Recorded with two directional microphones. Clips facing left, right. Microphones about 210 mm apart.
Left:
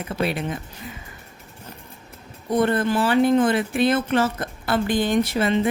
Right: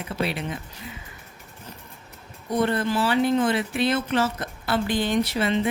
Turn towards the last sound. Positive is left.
turn(degrees=50)  # may be behind; listen again after turning